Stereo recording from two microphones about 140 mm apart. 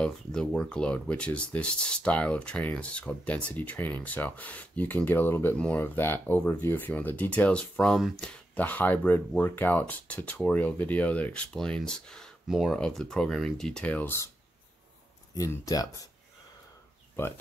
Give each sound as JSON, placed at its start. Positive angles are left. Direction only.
{"t": 0.0, "sound": "speech", "side_deg": 5}
{"t": 15.3, "sound": "speech", "side_deg": 25}